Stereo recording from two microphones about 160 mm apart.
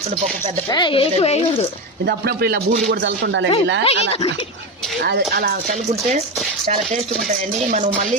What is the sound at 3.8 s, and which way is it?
Speech, 40° left (ahead or behind).